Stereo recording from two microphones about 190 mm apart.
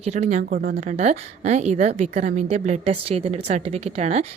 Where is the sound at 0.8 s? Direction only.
40° right (ahead or behind).